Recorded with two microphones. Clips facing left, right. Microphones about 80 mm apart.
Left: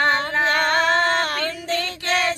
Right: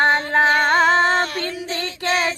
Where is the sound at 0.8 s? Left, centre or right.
Left.